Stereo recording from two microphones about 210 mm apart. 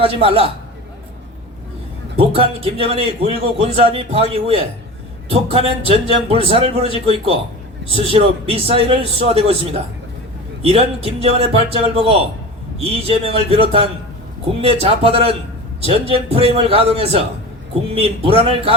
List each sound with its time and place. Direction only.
0.0 s a man's voice: 25° right (ahead or behind)
2.1 s a man's voice: 25° right (ahead or behind)